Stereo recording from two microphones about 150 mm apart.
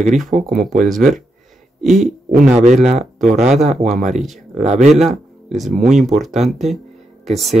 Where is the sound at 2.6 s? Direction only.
50° right (ahead or behind).